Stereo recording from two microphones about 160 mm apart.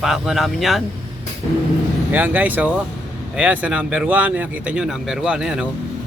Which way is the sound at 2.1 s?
10° right (ahead or behind).